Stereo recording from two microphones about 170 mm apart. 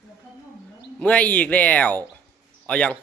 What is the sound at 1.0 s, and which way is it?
A man's voice, 10° left (ahead or behind).